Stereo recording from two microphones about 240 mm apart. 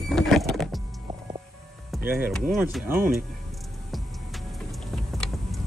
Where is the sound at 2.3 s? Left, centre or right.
Centre.